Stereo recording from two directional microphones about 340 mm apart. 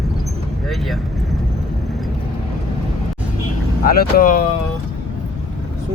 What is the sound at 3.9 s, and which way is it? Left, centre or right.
Speech, left.